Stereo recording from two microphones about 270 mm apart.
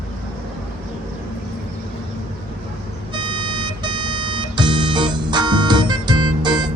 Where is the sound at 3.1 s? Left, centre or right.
Centre.